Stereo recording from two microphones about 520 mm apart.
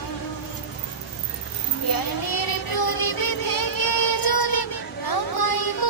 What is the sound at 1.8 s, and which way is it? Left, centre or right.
Child singing, left.